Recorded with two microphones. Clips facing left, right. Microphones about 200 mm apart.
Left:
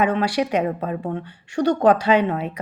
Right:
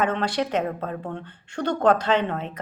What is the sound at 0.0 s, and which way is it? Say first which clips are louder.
A woman's voice: left 4 dB; 10° left (ahead or behind).